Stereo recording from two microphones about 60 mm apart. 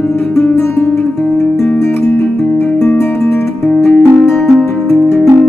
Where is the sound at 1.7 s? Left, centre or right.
Left.